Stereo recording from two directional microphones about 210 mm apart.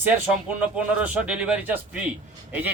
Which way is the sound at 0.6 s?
5° right (ahead or behind).